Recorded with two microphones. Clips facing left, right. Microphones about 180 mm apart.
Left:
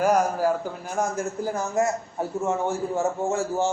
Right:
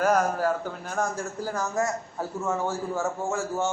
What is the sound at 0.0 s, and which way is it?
A man's voice, 10° left (ahead or behind).